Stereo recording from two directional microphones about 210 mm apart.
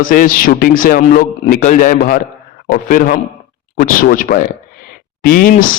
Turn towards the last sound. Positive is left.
turn(degrees=45)  # may be behind; listen again after turning